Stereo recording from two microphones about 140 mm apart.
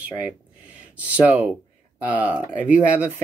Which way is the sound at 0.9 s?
10° right (ahead or behind).